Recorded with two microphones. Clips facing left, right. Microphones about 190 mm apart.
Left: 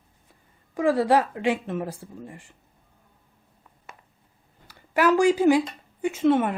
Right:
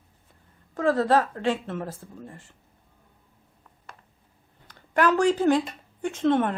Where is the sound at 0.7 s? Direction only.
10° left (ahead or behind).